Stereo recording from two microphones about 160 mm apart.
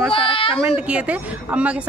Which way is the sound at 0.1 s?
35° left (ahead or behind).